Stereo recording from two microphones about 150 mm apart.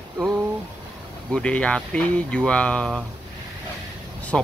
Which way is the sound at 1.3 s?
5° left (ahead or behind).